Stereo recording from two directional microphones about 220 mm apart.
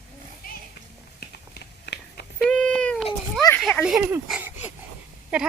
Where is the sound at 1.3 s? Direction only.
45° left (ahead or behind).